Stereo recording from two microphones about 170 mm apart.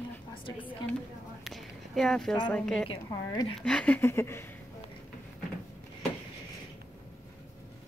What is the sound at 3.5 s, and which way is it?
Speech, 5° left (ahead or behind).